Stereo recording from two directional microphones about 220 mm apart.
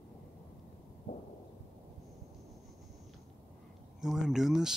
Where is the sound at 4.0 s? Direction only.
Centre (ahead or behind).